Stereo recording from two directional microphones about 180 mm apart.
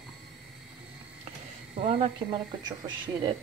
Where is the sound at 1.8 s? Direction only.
30° right (ahead or behind).